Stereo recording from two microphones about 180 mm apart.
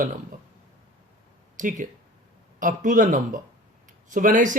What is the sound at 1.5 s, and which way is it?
Speech, 45° right (ahead or behind).